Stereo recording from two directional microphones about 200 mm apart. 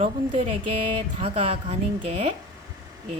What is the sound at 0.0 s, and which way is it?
Speech, 30° right (ahead or behind).